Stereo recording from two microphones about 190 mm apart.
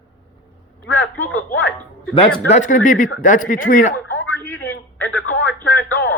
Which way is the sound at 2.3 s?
50° left (ahead or behind).